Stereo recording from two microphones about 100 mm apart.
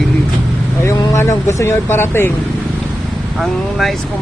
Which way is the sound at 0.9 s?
30° left (ahead or behind).